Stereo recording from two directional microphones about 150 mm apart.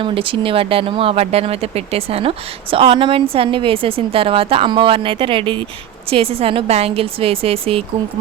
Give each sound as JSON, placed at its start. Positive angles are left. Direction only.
{"t": 0.0, "sound": "speech", "side_deg": -35}